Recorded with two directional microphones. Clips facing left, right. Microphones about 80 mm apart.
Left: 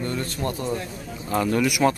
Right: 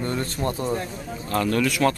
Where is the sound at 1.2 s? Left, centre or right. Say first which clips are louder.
Left 1 dB; centre.